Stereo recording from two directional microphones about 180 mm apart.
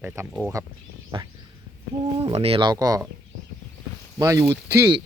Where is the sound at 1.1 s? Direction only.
25° right (ahead or behind).